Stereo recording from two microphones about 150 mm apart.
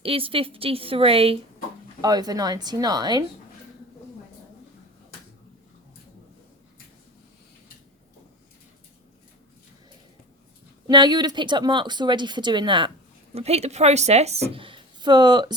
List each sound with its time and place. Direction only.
0.0 s a woman's voice: 40° right (ahead or behind)
2.0 s speech: 25° right (ahead or behind)
10.8 s speech: 30° right (ahead or behind)
13.3 s a woman's voice: 45° right (ahead or behind); by 15.5 s 30° right (ahead or behind)